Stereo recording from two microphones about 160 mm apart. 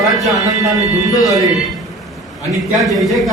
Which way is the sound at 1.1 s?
25° left (ahead or behind).